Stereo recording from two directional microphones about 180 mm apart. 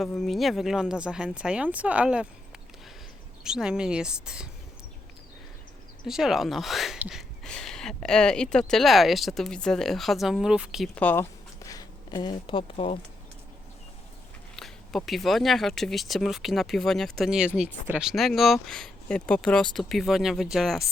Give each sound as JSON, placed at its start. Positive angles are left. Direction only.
{"t": 0.0, "sound": "speech", "side_deg": 0}
{"t": 3.4, "sound": "speech", "side_deg": -5}
{"t": 6.1, "sound": "speech", "side_deg": 0}
{"t": 10.9, "sound": "speech", "side_deg": 10}
{"t": 14.5, "sound": "speech", "side_deg": 0}